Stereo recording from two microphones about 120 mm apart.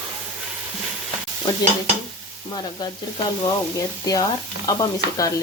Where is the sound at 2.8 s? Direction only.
35° left (ahead or behind).